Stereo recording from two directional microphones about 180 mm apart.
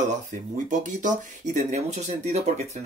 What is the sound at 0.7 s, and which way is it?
Speech, 45° right (ahead or behind).